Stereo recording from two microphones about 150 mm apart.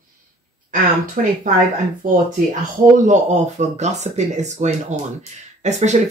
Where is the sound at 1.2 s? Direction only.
65° right (ahead or behind).